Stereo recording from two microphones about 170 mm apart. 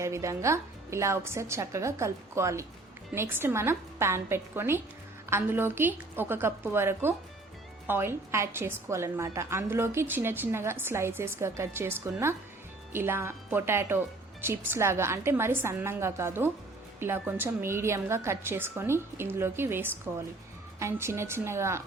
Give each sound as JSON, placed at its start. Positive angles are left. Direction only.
{"t": 0.0, "sound": "a woman's voice", "side_deg": -15}